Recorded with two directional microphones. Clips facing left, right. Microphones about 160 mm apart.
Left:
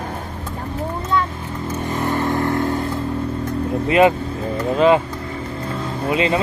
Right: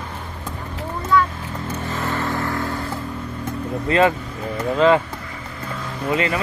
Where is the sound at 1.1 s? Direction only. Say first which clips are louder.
Right 4 dB; 25° left (ahead or behind).